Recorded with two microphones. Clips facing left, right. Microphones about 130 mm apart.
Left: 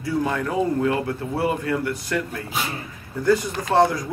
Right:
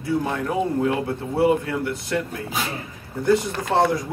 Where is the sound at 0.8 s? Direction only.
25° right (ahead or behind).